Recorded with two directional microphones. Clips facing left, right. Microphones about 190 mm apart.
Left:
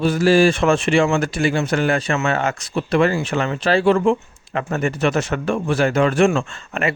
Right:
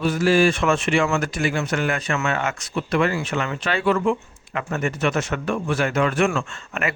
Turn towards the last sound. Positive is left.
turn(degrees=30)  # may be behind; listen again after turning